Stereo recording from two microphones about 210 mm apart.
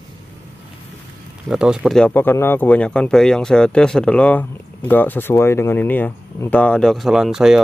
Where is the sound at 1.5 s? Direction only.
5° right (ahead or behind).